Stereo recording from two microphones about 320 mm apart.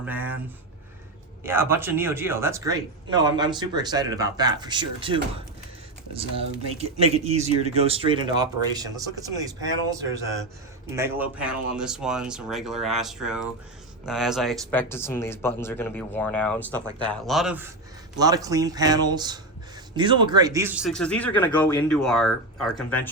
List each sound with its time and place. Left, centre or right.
0.0 s speech: centre
1.5 s speech: centre
10.9 s speech: centre